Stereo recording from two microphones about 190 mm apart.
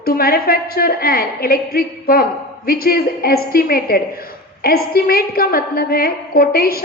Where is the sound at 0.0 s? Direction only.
50° left (ahead or behind).